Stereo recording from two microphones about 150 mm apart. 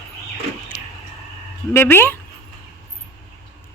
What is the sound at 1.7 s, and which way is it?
Speech, 15° left (ahead or behind).